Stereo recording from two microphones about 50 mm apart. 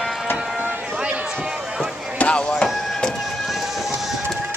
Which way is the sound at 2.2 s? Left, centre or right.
Left.